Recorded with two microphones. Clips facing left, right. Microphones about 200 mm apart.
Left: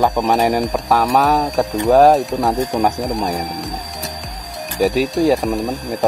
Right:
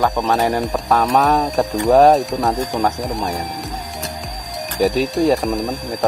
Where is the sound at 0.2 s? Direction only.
15° left (ahead or behind).